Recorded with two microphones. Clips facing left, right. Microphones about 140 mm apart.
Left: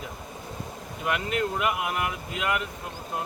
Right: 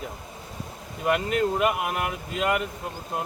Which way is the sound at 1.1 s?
40° right (ahead or behind).